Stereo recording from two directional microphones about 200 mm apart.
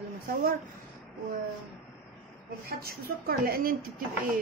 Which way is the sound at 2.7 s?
50° right (ahead or behind).